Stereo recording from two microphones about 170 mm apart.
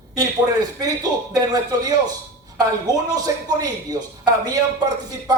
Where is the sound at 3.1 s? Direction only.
25° right (ahead or behind).